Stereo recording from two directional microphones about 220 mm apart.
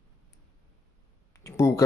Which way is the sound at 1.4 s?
15° left (ahead or behind).